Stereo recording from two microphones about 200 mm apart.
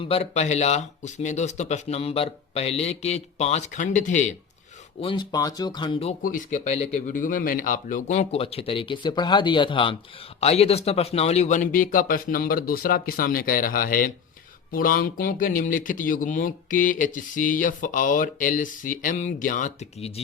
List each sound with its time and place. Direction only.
0.0 s speech: 30° left (ahead or behind)
4.9 s speech: 25° left (ahead or behind)
6.2 s speech: 40° left (ahead or behind)